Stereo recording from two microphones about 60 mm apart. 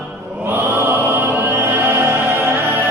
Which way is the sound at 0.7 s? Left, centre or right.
Right.